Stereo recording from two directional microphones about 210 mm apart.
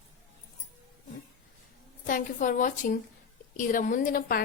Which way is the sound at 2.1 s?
40° left (ahead or behind).